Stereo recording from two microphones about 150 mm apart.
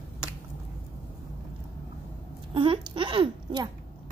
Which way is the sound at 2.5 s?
35° right (ahead or behind).